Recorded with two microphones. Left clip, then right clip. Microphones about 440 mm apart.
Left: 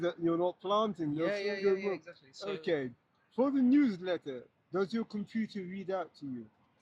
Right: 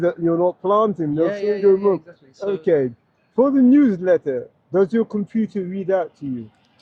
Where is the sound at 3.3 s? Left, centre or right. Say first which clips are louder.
Right 14 dB; centre.